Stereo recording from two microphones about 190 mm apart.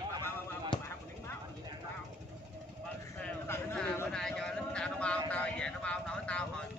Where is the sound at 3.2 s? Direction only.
10° left (ahead or behind).